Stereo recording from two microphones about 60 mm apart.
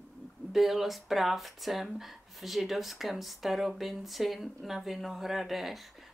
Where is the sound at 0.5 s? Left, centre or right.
Centre.